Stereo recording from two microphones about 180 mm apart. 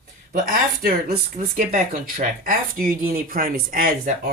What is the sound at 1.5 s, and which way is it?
Speech, 45° right (ahead or behind).